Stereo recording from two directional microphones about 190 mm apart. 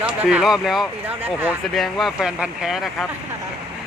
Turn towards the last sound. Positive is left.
turn(degrees=0)  # may be behind; listen again after turning